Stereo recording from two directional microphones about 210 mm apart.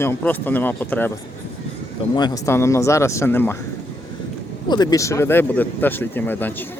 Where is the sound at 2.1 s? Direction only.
20° left (ahead or behind).